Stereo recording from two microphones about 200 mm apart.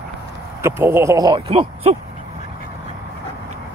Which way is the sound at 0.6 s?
10° right (ahead or behind).